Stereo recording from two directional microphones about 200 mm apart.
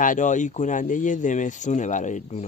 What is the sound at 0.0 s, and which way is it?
Speech, 40° left (ahead or behind).